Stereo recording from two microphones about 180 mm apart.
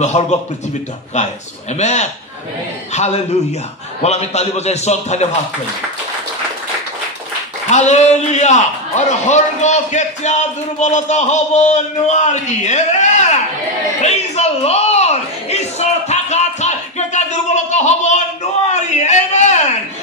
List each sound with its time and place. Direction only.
0.0 s a man's voice: 40° left (ahead or behind)
7.7 s a man's voice: 40° left (ahead or behind)
14.0 s a sound: 35° left (ahead or behind)